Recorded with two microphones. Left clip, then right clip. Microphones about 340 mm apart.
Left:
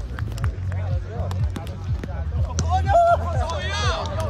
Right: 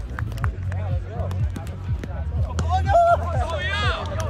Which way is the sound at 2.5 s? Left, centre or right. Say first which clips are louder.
Even; centre.